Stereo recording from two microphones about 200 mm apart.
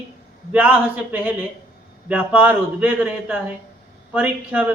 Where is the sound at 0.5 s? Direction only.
5° right (ahead or behind).